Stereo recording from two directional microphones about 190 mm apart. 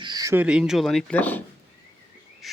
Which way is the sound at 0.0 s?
20° right (ahead or behind).